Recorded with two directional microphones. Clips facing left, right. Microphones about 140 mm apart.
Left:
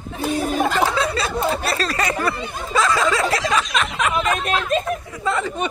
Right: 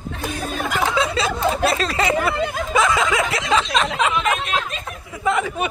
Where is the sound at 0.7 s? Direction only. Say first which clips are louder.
Left 1 dB; 20° right (ahead or behind).